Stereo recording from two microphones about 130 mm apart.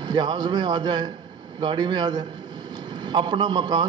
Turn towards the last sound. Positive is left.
turn(degrees=-35)  # may be behind; listen again after turning